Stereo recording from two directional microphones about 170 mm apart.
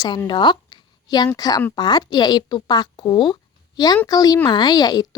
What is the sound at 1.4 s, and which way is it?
A woman's voice, 20° left (ahead or behind).